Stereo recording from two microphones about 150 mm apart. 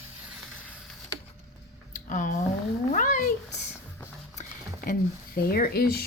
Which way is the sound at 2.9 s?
55° left (ahead or behind).